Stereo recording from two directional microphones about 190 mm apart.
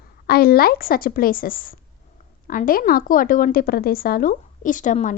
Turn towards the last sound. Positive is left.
turn(degrees=40)  # may be behind; listen again after turning